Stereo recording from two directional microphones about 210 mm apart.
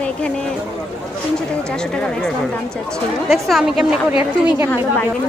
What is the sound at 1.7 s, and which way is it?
A woman's voice, 5° left (ahead or behind).